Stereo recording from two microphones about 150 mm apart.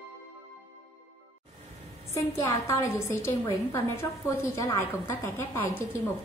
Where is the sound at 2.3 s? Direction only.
20° left (ahead or behind).